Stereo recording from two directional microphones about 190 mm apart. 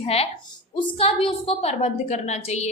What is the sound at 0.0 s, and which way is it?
A woman's voice, 30° left (ahead or behind).